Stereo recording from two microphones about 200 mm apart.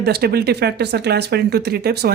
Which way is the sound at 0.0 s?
50° right (ahead or behind).